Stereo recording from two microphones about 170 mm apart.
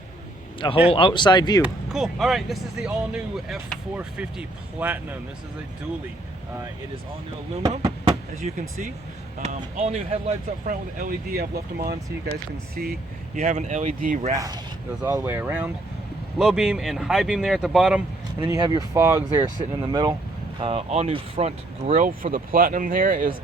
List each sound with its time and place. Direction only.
0.9 s speech: 30° left (ahead or behind)
1.6 s speech: 5° right (ahead or behind)
8.0 s a sound: 45° right (ahead or behind)
9.4 s speech: 45° right (ahead or behind); by 13.4 s 60° right (ahead or behind)
13.4 s speech: 45° right (ahead or behind)
14.3 s speech: 20° right (ahead or behind); by 18.0 s 5° right (ahead or behind)
18.3 s speech: 15° right (ahead or behind)
20.6 s speech: 35° right (ahead or behind)
21.9 s speech: 55° right (ahead or behind)